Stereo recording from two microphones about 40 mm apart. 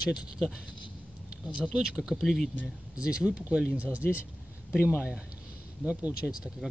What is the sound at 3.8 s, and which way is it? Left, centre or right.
Speech, right.